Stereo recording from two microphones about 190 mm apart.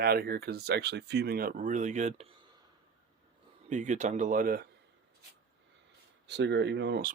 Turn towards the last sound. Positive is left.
turn(degrees=-55)  # may be behind; listen again after turning